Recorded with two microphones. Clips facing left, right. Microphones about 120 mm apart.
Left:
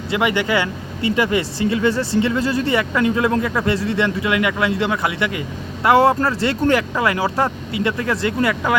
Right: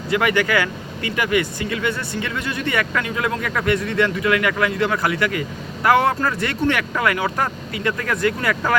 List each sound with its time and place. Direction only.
0.1 s speech: 20° left (ahead or behind)